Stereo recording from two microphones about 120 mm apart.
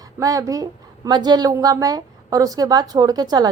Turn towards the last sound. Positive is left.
turn(degrees=-35)  # may be behind; listen again after turning